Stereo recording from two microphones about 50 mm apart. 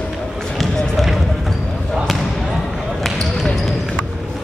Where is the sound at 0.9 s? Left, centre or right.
Centre.